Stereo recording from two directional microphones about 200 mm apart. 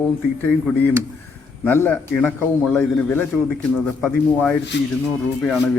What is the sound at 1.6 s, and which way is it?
Speech, 10° left (ahead or behind).